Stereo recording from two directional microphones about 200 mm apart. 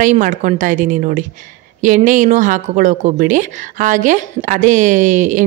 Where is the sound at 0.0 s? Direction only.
40° right (ahead or behind).